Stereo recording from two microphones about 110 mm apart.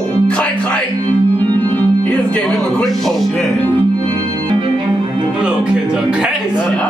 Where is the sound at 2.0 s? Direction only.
10° left (ahead or behind).